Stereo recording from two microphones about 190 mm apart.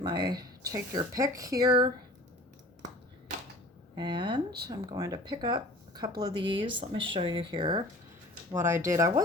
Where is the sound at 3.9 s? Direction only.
25° right (ahead or behind).